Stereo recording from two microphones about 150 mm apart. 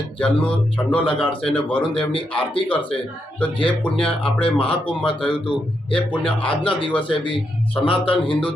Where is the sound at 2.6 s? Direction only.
35° left (ahead or behind).